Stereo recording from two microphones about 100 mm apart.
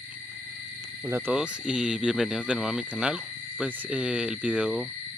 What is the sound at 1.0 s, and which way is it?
Speech, 25° right (ahead or behind).